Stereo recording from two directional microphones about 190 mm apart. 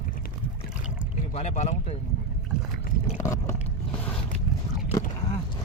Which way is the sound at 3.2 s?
15° left (ahead or behind).